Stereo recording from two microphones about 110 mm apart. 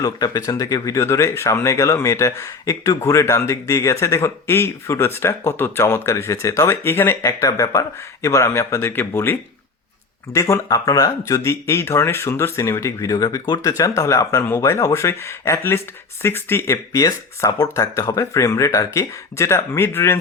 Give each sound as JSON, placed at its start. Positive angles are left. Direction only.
{"t": 0.0, "sound": "speech", "side_deg": 35}